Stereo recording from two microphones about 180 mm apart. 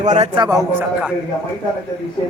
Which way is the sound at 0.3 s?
20° right (ahead or behind).